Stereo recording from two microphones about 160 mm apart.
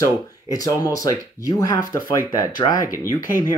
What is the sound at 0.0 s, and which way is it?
Speech, 20° left (ahead or behind).